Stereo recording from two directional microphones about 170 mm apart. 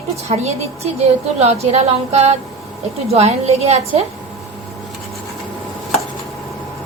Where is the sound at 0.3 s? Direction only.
40° right (ahead or behind).